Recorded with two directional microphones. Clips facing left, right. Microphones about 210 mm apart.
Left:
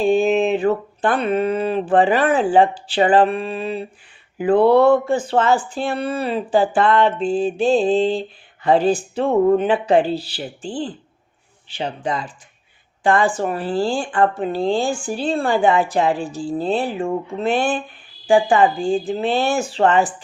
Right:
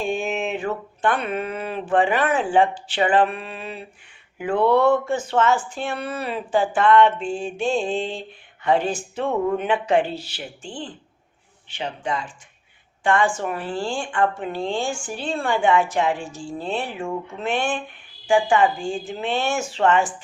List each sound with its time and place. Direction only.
0.0 s speech: 35° left (ahead or behind)